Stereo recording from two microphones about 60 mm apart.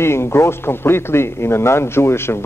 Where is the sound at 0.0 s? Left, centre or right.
Left.